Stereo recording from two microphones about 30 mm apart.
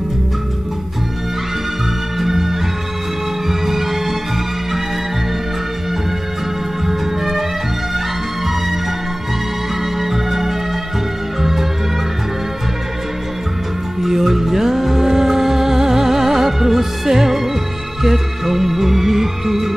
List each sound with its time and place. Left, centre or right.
2.1 s music: centre
6.9 s music: centre
10.0 s music: centre
14.0 s music: centre